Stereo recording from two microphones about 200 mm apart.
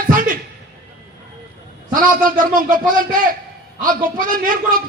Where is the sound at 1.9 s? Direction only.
45° right (ahead or behind).